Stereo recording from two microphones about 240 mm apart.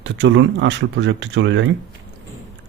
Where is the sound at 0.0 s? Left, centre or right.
Right.